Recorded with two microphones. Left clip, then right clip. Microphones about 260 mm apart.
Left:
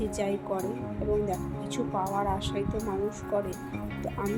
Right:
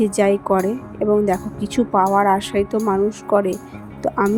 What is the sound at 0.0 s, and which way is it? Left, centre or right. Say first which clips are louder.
A woman's voice: right 14 dB; right.